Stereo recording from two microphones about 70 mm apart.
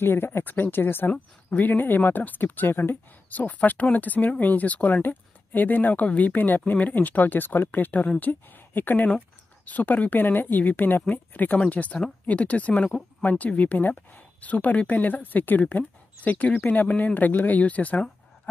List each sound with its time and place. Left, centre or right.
0.0 s speech: left